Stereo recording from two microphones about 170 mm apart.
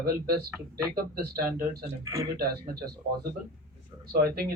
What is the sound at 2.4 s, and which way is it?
Speech, 65° right (ahead or behind).